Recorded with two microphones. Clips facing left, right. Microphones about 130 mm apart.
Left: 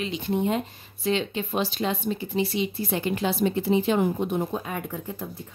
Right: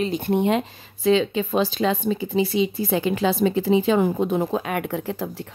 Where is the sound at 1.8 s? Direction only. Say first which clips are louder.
Right 5 dB; 90° right.